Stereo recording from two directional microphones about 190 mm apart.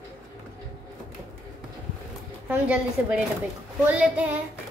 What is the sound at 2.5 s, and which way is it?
Child singing, 5° right (ahead or behind).